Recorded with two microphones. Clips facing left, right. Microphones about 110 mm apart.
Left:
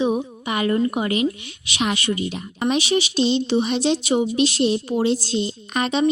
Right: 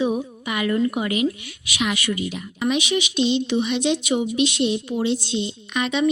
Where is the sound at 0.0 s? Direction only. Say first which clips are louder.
Left 1 dB; 25° left (ahead or behind).